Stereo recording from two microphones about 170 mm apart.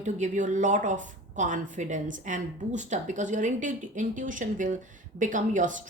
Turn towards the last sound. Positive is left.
turn(degrees=-50)  # may be behind; listen again after turning